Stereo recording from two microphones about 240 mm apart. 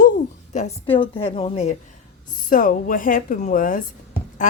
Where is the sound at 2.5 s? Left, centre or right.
Left.